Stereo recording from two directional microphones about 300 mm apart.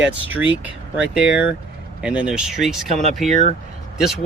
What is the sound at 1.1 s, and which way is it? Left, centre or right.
Speech, centre.